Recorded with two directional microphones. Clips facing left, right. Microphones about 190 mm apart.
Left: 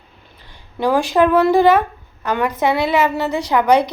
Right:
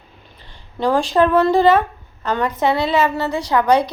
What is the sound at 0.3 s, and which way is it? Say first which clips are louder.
A woman's voice: left 1 dB; 15° left (ahead or behind).